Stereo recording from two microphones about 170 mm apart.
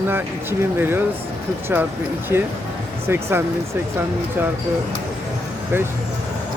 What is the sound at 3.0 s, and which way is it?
Speech, 15° right (ahead or behind).